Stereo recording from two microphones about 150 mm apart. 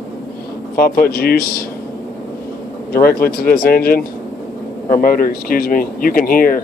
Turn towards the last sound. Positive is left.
turn(degrees=70)  # may be behind; listen again after turning